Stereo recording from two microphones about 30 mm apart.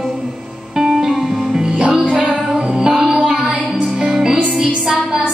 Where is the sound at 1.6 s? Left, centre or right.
Right.